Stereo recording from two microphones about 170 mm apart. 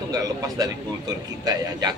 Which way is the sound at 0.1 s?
20° right (ahead or behind).